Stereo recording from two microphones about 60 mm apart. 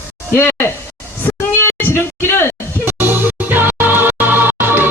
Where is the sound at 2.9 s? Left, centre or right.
Right.